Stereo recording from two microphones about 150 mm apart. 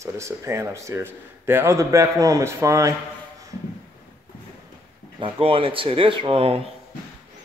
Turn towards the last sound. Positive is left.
turn(degrees=-40)  # may be behind; listen again after turning